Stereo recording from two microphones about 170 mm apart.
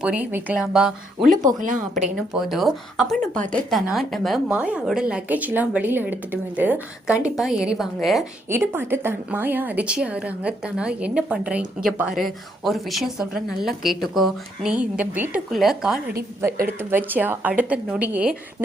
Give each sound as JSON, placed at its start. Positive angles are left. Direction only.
{"t": 0.0, "sound": "speech", "side_deg": -10}
{"t": 1.3, "sound": "a woman's voice", "side_deg": -50}
{"t": 2.1, "sound": "a woman's voice", "side_deg": 0}
{"t": 8.4, "sound": "a woman's voice", "side_deg": -15}